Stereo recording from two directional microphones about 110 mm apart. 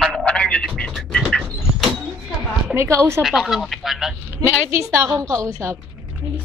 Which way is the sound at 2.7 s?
25° right (ahead or behind).